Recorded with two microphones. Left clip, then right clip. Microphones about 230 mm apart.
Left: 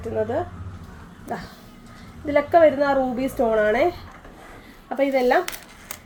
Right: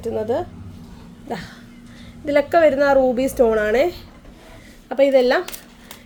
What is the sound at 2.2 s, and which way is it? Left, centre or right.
A woman's voice, right.